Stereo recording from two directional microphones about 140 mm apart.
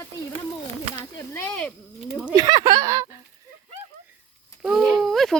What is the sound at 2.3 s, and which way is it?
Speech, 30° right (ahead or behind).